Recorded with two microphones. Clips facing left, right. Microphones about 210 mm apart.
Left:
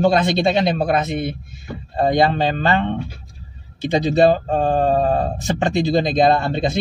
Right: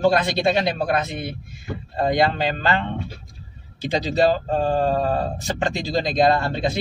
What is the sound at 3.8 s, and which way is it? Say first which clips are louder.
Speech: left 5 dB; 55° left (ahead or behind).